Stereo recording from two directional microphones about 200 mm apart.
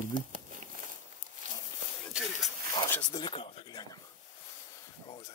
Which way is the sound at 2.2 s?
5° right (ahead or behind).